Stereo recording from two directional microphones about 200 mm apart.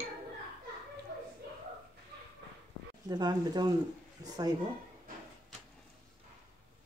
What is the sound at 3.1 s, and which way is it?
Speech, 20° right (ahead or behind).